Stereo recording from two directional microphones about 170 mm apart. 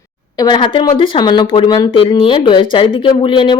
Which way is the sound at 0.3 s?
25° left (ahead or behind).